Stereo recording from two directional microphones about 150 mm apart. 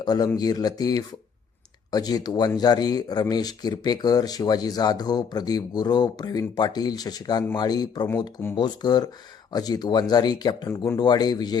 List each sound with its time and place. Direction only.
0.0 s speech: 25° left (ahead or behind)